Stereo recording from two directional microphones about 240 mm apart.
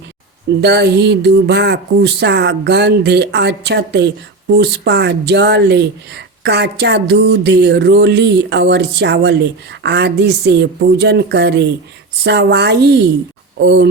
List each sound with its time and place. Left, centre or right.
0.6 s speech: right